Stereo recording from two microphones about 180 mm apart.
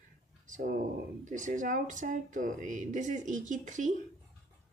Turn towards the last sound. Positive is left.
turn(degrees=-45)  # may be behind; listen again after turning